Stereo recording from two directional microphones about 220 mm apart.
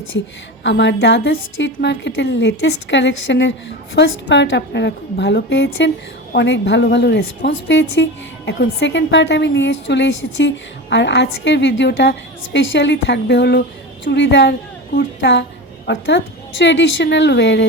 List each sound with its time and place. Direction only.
0.6 s a woman's voice: 55° left (ahead or behind)